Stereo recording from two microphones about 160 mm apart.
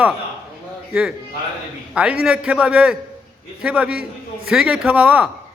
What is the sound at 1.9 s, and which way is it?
Speech, 5° right (ahead or behind).